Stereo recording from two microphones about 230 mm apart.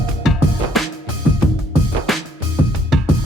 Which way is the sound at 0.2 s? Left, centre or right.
Centre.